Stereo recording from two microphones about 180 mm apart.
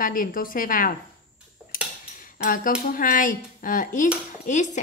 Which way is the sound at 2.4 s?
50° left (ahead or behind).